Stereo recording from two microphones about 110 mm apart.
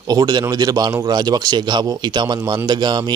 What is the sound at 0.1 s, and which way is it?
Speech, 35° right (ahead or behind).